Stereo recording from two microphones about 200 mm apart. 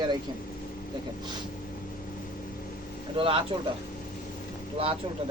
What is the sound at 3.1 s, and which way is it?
Speech, 25° right (ahead or behind).